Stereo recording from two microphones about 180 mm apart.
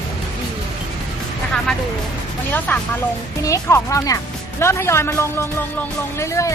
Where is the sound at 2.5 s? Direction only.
10° left (ahead or behind).